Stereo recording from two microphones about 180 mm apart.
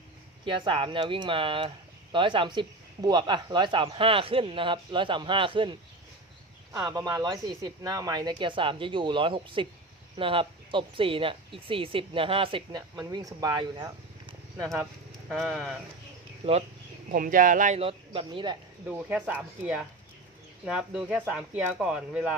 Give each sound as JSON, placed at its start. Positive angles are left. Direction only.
{"t": 0.4, "sound": "speech", "side_deg": -25}
{"t": 6.7, "sound": "speech", "side_deg": -20}
{"t": 13.0, "sound": "speech", "side_deg": -20}
{"t": 15.3, "sound": "speech", "side_deg": 0}
{"t": 16.4, "sound": "speech", "side_deg": -35}
{"t": 17.1, "sound": "speech", "side_deg": -50}
{"t": 18.9, "sound": "speech", "side_deg": -5}